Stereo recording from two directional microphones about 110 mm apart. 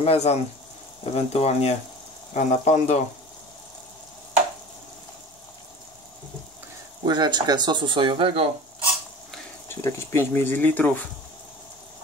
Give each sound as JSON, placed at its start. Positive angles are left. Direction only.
{"t": 0.0, "sound": "speech", "side_deg": 70}
{"t": 2.3, "sound": "speech", "side_deg": 90}
{"t": 7.0, "sound": "speech", "side_deg": -40}
{"t": 9.7, "sound": "speech", "side_deg": 25}